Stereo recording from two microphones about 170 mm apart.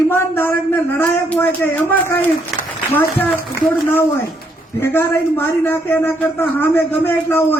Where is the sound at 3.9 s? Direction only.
15° left (ahead or behind).